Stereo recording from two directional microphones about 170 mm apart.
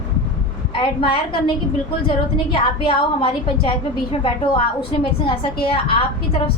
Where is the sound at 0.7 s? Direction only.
30° left (ahead or behind).